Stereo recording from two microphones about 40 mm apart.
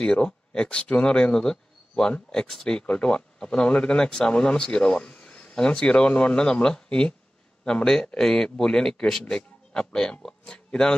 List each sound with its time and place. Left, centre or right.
0.0 s a man's voice: left